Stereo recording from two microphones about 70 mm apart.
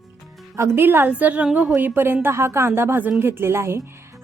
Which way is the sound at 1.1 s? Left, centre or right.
Right.